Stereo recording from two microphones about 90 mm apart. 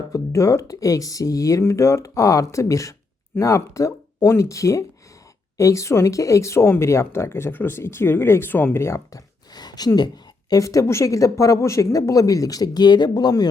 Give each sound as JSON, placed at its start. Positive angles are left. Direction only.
{"t": 0.1, "sound": "speech", "side_deg": 35}
{"t": 9.5, "sound": "a sound", "side_deg": 50}
{"t": 10.5, "sound": "speech", "side_deg": 40}